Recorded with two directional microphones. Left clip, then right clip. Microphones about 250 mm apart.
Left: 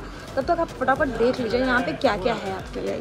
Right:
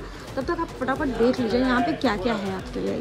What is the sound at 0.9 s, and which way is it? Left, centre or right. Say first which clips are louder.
Speech: left 1 dB; centre.